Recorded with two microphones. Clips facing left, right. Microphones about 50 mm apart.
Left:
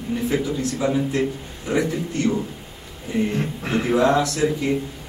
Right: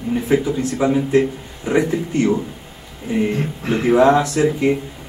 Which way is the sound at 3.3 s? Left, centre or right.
Centre.